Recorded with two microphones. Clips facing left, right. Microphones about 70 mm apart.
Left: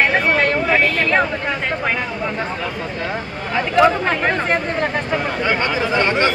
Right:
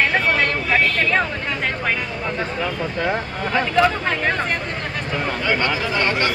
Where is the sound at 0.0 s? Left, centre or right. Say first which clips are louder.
Left 3 dB; centre.